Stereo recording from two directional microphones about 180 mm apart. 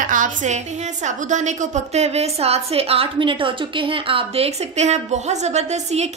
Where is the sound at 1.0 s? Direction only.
40° right (ahead or behind).